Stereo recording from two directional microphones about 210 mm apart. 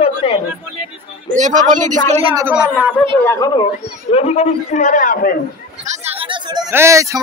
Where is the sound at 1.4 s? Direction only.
35° right (ahead or behind).